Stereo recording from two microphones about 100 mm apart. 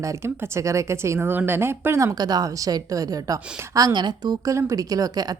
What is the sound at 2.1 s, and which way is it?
A woman's voice, 40° right (ahead or behind).